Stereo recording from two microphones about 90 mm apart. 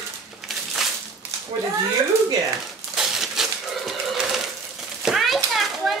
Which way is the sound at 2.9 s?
5° right (ahead or behind).